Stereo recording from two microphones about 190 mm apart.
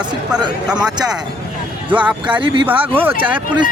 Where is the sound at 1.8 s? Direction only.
10° right (ahead or behind).